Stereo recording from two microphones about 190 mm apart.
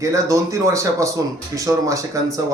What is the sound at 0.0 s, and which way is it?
Speech, 15° right (ahead or behind).